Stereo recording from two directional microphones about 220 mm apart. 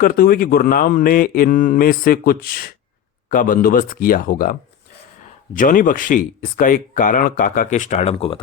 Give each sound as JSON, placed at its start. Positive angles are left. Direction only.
{"t": 0.0, "sound": "speech", "side_deg": 40}
{"t": 5.5, "sound": "speech", "side_deg": 40}